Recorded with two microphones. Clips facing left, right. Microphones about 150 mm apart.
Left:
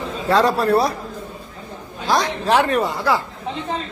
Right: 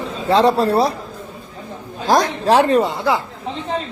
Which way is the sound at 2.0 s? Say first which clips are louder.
Right 4 dB; 45° right (ahead or behind).